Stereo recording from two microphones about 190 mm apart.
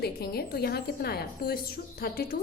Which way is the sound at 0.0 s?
55° left (ahead or behind).